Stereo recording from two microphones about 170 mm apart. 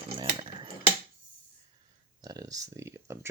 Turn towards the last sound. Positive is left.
turn(degrees=-15)  # may be behind; listen again after turning